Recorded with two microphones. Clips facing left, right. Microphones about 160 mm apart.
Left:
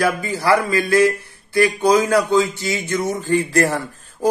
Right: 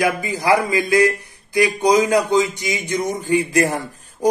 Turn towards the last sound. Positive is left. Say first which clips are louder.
# right 1 dB
turn(degrees=-15)  # may be behind; listen again after turning